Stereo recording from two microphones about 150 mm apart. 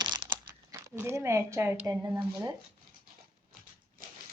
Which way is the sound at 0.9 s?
15° right (ahead or behind).